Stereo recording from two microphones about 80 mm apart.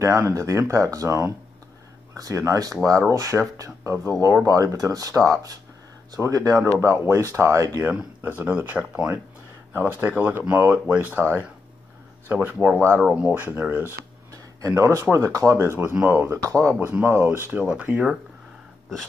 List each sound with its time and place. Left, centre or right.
0.0 s speech: right
4.5 s speech: right
6.7 s speech: right
8.2 s speech: right
9.8 s speech: right
13.0 s speech: centre
13.3 s speech: right
14.3 s a sound: right
14.8 s speech: right
16.4 s speech: right
16.8 s speech: right
17.5 s speech: centre